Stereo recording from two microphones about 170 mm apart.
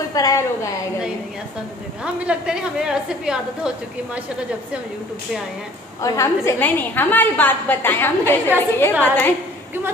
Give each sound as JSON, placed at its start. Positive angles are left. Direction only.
{"t": 0.1, "sound": "a woman's voice", "side_deg": 20}
{"t": 2.2, "sound": "a woman's voice", "side_deg": -5}
{"t": 6.0, "sound": "a woman's voice", "side_deg": 15}